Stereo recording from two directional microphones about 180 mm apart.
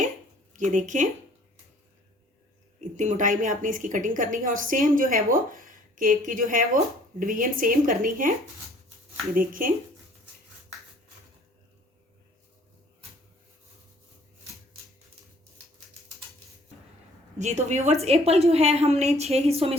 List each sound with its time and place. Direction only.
0.5 s a woman's voice: 45° right (ahead or behind)
2.9 s a woman's voice: 45° right (ahead or behind)
9.3 s a woman's voice: 50° right (ahead or behind)
17.3 s a woman's voice: 40° right (ahead or behind)